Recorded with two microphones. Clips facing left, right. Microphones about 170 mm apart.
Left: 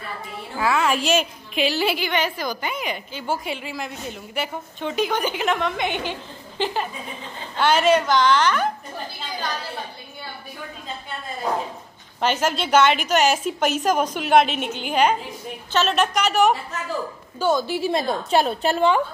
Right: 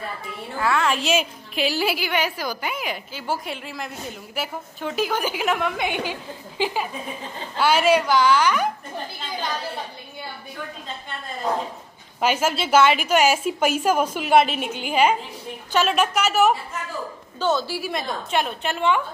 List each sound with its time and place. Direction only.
0.6 s a woman's voice: 5° left (ahead or behind); by 8.6 s 10° right (ahead or behind)
12.2 s a woman's voice: 5° right (ahead or behind)
17.4 s a woman's voice: 10° left (ahead or behind); by 19.0 s 35° left (ahead or behind)